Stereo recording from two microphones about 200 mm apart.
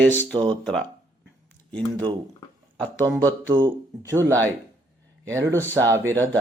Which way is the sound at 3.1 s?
10° left (ahead or behind).